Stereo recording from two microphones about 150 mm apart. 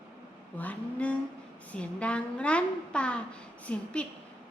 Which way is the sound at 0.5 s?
10° left (ahead or behind).